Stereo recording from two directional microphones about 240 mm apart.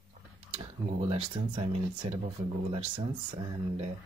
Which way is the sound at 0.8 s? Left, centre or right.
Right.